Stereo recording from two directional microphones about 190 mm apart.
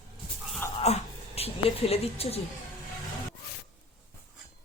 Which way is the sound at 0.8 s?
35° left (ahead or behind).